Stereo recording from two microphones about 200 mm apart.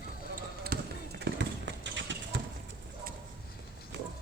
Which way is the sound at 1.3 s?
65° right (ahead or behind).